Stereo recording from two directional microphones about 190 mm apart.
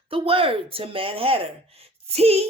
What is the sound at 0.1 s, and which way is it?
Speech, 30° right (ahead or behind).